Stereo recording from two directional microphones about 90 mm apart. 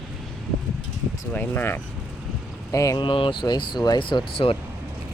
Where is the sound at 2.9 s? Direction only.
70° left (ahead or behind).